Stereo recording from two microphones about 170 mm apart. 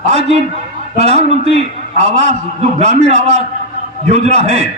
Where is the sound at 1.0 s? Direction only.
40° right (ahead or behind).